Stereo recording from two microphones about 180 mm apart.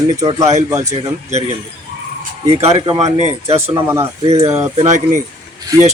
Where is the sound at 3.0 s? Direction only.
35° right (ahead or behind).